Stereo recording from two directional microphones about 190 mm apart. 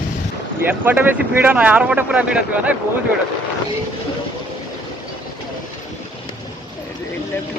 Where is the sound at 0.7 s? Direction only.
10° right (ahead or behind).